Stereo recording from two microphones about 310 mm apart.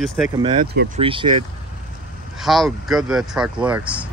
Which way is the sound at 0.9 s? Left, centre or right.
Centre.